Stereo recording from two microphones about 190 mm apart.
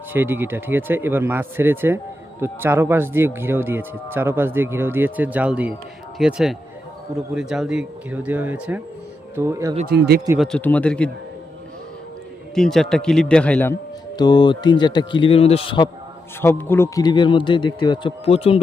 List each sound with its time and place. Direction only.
0.1 s a man's voice: 10° right (ahead or behind)
9.8 s speech: 55° right (ahead or behind)
10.3 s a man's voice: centre (ahead or behind)
12.5 s a man's voice: centre (ahead or behind)
14.2 s speech: 20° left (ahead or behind)
16.4 s speech: 10° left (ahead or behind); by 18.6 s 30° left (ahead or behind)